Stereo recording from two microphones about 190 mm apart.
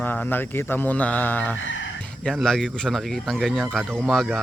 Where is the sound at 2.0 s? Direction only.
5° left (ahead or behind).